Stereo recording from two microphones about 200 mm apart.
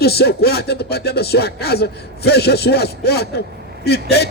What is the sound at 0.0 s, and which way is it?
A man's voice, 50° left (ahead or behind).